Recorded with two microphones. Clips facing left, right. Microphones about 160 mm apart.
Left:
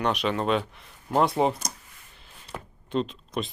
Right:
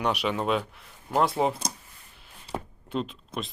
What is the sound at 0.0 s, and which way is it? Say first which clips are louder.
Speech: left 1 dB; 10° right (ahead or behind).